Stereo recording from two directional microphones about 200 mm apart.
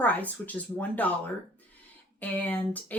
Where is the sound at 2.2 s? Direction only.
10° left (ahead or behind).